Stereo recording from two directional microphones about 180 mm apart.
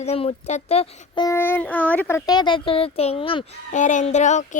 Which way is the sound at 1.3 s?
10° left (ahead or behind).